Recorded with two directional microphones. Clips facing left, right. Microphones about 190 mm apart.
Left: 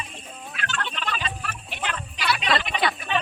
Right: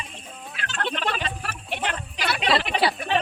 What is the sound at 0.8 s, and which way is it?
Fowl, 65° right (ahead or behind).